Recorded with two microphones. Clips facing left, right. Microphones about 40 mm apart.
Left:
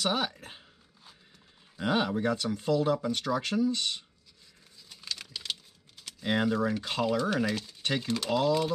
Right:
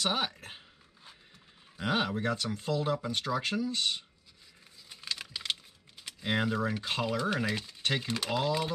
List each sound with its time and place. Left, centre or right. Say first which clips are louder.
0.0 s speech: left 2 dB; centre
0.5 s dog: right 1 dB; centre
1.8 s speech: left 3 dB; centre
4.8 s a sound: right 1 dB; centre
6.8 s speech: left 2 dB; right
7.1 s speech: left 4 dB; centre